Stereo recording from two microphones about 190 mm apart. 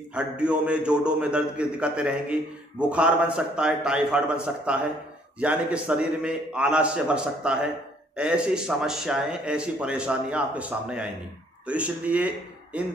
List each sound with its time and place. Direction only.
0.1 s a man's voice: 5° right (ahead or behind)